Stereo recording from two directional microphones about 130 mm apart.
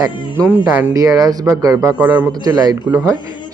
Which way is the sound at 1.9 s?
15° right (ahead or behind).